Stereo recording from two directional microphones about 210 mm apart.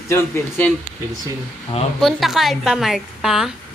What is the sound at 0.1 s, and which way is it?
Speech, 10° left (ahead or behind).